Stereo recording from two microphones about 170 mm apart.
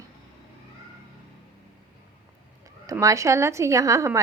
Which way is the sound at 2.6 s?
20° right (ahead or behind).